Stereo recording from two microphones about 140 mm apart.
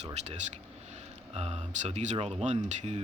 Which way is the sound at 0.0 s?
50° right (ahead or behind).